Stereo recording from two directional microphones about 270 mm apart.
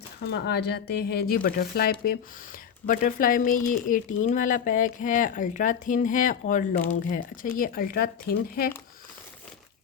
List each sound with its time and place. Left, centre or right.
0.3 s speech: left